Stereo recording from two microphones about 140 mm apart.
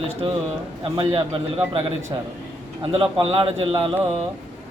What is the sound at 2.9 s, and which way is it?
A man's voice, 45° right (ahead or behind).